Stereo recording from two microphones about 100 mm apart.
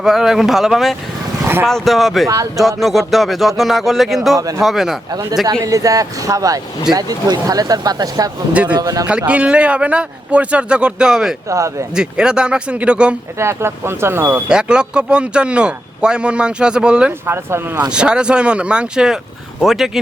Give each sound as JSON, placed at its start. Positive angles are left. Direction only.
{"t": 0.0, "sound": "speech", "side_deg": -5}
{"t": 2.2, "sound": "speech", "side_deg": -35}
{"t": 2.6, "sound": "speech", "side_deg": 0}
{"t": 4.4, "sound": "speech", "side_deg": -35}
{"t": 4.6, "sound": "speech", "side_deg": -5}
{"t": 5.5, "sound": "speech", "side_deg": -35}
{"t": 9.0, "sound": "speech", "side_deg": -10}
{"t": 11.4, "sound": "speech", "side_deg": -30}
{"t": 11.9, "sound": "speech", "side_deg": -5}
{"t": 13.4, "sound": "speech", "side_deg": -25}
{"t": 14.4, "sound": "speech", "side_deg": -10}
{"t": 17.2, "sound": "speech", "side_deg": -25}
{"t": 17.9, "sound": "speech", "side_deg": -10}